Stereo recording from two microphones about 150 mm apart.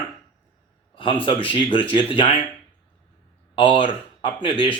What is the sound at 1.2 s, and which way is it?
Speech, 35° left (ahead or behind).